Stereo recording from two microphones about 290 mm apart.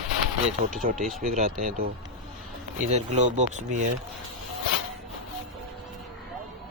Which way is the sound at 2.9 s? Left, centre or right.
Right.